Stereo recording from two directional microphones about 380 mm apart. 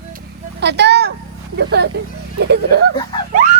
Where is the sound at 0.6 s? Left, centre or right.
Right.